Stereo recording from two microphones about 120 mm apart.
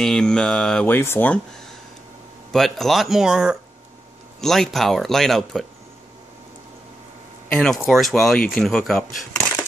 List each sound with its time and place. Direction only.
0.0 s mantra: 5° left (ahead or behind)
0.9 s speech: 20° left (ahead or behind)
2.5 s speech: centre (ahead or behind)
7.4 s speech: 5° left (ahead or behind)